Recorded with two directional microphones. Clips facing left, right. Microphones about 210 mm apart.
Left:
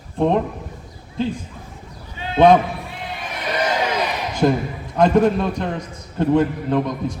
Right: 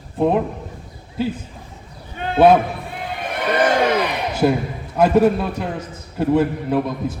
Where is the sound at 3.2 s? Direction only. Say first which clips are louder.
Right 5 dB; 55° right (ahead or behind).